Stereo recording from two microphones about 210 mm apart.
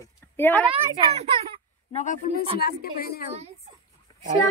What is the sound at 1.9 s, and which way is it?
A child's voice, 40° left (ahead or behind).